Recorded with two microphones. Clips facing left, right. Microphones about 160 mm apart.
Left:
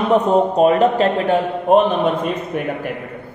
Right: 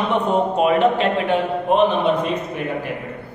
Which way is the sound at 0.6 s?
40° left (ahead or behind).